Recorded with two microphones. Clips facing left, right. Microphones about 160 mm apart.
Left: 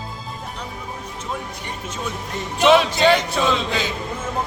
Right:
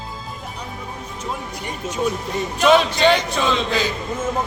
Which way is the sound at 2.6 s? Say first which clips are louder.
Even; 5° left (ahead or behind).